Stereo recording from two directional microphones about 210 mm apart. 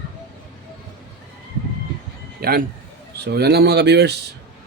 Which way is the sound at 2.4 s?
45° right (ahead or behind).